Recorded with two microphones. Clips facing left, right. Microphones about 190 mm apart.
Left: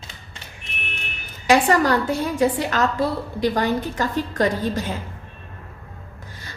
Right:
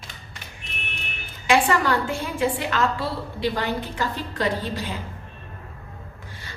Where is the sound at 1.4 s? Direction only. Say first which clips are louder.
Left 3 dB; 40° left (ahead or behind).